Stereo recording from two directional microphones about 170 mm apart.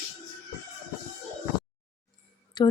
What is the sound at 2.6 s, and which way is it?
Speech, 25° left (ahead or behind).